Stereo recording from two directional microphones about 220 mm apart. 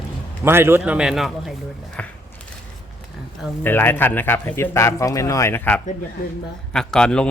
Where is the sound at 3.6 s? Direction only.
10° left (ahead or behind).